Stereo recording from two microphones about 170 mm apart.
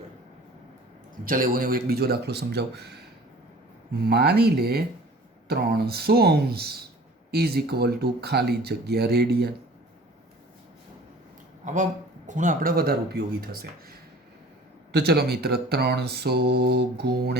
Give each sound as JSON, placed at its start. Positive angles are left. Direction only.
{"t": 1.1, "sound": "speech", "side_deg": -55}
{"t": 4.0, "sound": "speech", "side_deg": -70}
{"t": 11.6, "sound": "speech", "side_deg": -45}
{"t": 14.9, "sound": "speech", "side_deg": -70}